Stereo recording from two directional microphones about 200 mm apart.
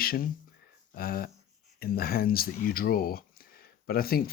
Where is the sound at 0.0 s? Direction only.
50° left (ahead or behind).